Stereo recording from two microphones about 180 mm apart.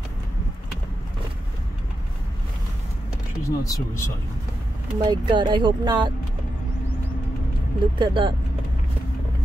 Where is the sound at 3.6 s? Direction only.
15° left (ahead or behind).